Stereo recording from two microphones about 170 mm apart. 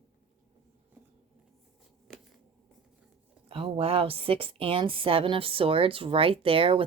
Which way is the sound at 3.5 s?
35° right (ahead or behind).